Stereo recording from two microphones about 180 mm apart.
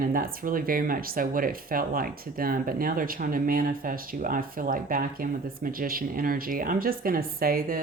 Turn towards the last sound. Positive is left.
turn(degrees=-55)  # may be behind; listen again after turning